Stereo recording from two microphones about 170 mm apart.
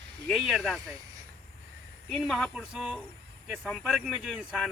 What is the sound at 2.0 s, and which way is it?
Speech, centre (ahead or behind).